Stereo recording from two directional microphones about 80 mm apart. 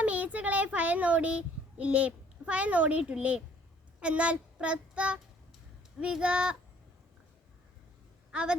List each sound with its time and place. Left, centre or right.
0.0 s a child's voice: centre
4.0 s child singing: centre
6.0 s speech: centre
8.3 s speech: centre